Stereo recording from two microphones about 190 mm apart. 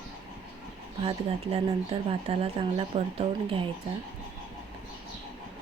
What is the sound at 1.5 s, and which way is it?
Speech, 35° right (ahead or behind).